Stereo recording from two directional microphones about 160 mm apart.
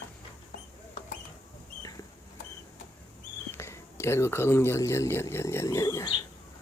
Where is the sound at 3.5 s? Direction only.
15° left (ahead or behind).